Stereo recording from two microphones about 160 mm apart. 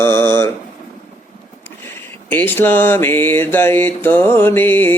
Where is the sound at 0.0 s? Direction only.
15° left (ahead or behind).